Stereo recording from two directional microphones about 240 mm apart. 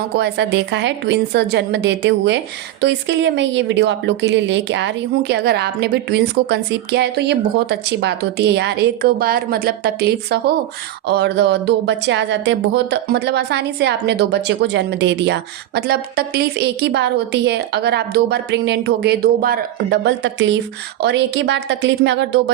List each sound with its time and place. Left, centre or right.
0.2 s a woman's voice: right